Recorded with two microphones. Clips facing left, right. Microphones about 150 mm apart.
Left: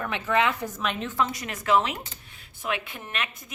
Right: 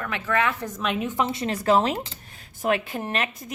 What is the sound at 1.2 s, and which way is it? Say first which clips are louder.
Speech: right 7 dB; 30° right (ahead or behind).